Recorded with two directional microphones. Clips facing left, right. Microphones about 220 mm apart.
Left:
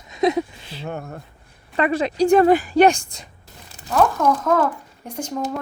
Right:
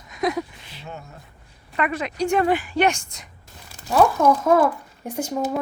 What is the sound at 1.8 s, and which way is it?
Speech, 30° left (ahead or behind).